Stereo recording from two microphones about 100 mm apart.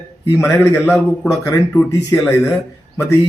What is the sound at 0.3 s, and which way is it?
Speech, 25° left (ahead or behind).